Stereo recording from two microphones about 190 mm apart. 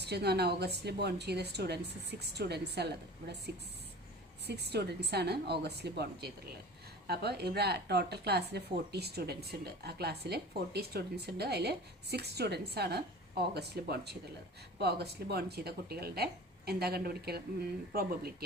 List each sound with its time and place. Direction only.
0.0 s a woman's voice: 60° right (ahead or behind)
4.4 s a woman's voice: 60° right (ahead or behind)